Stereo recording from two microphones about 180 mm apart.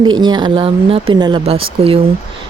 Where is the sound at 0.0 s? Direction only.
25° right (ahead or behind).